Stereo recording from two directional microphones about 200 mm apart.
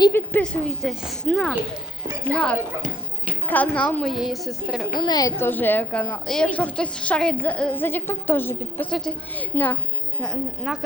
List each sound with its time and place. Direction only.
0.1 s a woman's voice: 10° left (ahead or behind)
4.9 s a woman's voice: 20° left (ahead or behind); by 10.8 s centre (ahead or behind)